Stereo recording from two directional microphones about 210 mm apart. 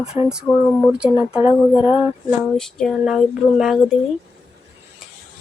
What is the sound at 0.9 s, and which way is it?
Speech, 5° right (ahead or behind).